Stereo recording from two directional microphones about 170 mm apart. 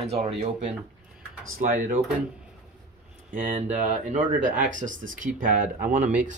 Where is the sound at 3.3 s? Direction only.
50° right (ahead or behind).